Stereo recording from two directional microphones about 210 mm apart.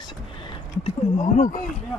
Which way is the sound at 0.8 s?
35° left (ahead or behind).